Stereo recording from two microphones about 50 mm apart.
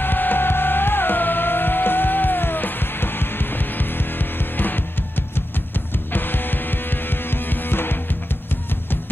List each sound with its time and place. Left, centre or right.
0.0 s music: left
6.1 s music: left